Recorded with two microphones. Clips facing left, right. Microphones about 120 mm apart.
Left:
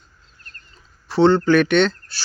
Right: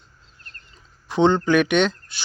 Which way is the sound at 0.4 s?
20° right (ahead or behind).